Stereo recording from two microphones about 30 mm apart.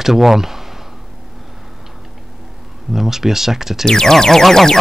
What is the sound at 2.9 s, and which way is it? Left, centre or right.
Speech, centre.